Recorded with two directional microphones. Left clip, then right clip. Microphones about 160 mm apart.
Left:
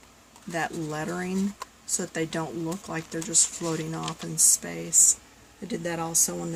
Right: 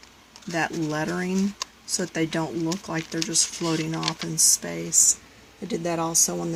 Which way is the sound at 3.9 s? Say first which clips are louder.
Right 6 dB; 10° right (ahead or behind).